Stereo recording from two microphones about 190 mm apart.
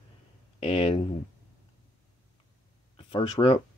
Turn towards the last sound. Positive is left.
turn(degrees=30)  # may be behind; listen again after turning